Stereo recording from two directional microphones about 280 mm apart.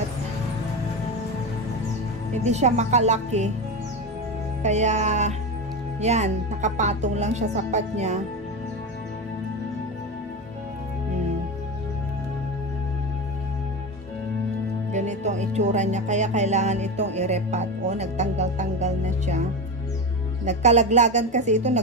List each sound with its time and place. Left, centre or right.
2.3 s speech: right
4.6 s speech: right
14.9 s speech: right
20.4 s speech: right